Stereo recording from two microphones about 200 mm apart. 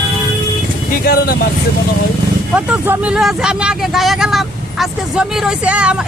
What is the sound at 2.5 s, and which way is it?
Speech, 10° right (ahead or behind).